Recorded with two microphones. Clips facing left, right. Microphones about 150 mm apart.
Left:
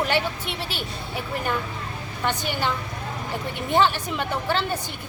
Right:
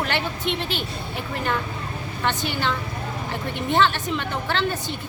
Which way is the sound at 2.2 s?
10° left (ahead or behind).